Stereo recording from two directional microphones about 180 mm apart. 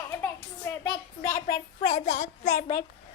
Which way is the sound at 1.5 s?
50° left (ahead or behind).